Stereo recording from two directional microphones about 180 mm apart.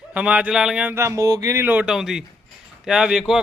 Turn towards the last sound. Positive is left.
turn(degrees=-5)  # may be behind; listen again after turning